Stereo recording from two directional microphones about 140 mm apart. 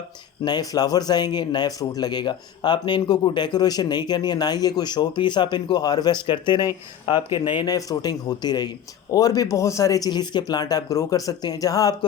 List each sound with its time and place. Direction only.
0.4 s speech: 30° left (ahead or behind)